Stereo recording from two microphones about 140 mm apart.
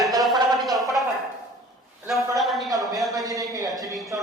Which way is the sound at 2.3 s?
Centre (ahead or behind).